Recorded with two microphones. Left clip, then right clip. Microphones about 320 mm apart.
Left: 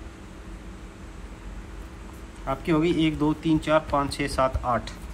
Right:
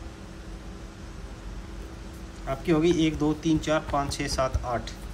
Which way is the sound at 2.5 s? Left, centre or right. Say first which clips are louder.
Even; centre.